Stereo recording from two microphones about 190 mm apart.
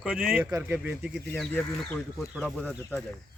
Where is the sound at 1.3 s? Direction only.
10° left (ahead or behind).